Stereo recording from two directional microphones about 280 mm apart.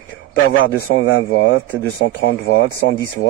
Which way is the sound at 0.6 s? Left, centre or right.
Left.